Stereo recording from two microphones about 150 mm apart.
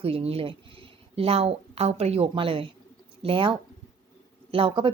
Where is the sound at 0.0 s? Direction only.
40° right (ahead or behind).